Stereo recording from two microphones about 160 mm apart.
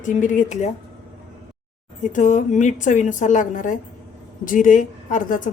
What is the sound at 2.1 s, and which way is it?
A woman's voice, 50° left (ahead or behind).